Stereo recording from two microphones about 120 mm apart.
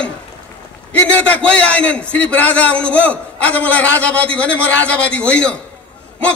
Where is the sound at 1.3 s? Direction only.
10° left (ahead or behind).